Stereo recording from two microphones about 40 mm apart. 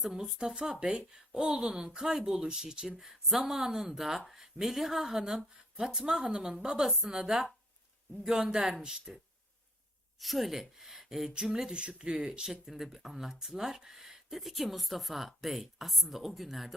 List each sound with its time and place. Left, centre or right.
0.3 s speech: centre
10.2 s speech: centre; by 12.3 s right
12.3 s speech: centre